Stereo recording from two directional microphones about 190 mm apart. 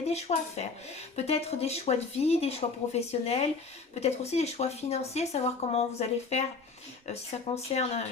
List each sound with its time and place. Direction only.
0.0 s speech: 35° left (ahead or behind)
7.7 s speech: 35° left (ahead or behind)